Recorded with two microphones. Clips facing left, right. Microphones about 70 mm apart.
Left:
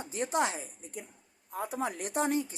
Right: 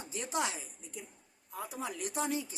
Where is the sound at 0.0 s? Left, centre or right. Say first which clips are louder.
Left 5 dB; left.